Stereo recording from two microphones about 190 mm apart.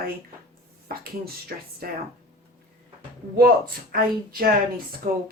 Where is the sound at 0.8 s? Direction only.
55° right (ahead or behind).